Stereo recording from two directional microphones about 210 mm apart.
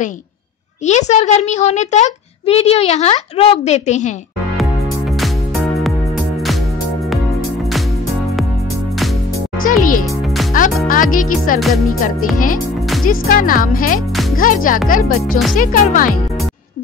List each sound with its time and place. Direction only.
0.8 s a child's voice: 35° left (ahead or behind)
9.7 s a child's voice: 40° left (ahead or behind)
10.5 s music: 40° left (ahead or behind)
10.9 s speech: 40° left (ahead or behind)
11.6 s music: centre (ahead or behind)
13.0 s a child's voice: 40° left (ahead or behind)